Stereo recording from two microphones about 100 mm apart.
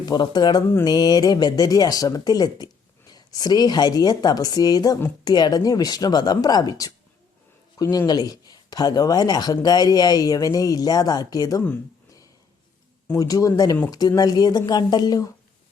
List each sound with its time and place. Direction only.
0.0 s speech: 45° left (ahead or behind)
13.1 s speech: 35° left (ahead or behind)